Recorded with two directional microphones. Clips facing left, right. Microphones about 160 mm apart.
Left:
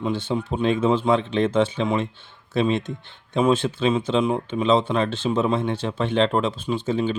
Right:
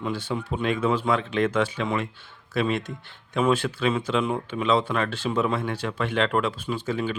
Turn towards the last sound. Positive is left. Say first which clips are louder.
# left 4 dB
turn(degrees=25)  # may be behind; listen again after turning